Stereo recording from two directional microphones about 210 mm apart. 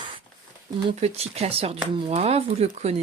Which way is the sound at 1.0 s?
30° right (ahead or behind).